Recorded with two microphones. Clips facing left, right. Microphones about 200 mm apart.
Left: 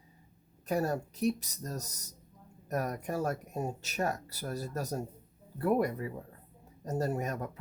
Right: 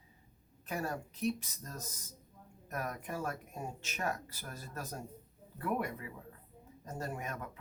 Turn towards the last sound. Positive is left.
turn(degrees=40)  # may be behind; listen again after turning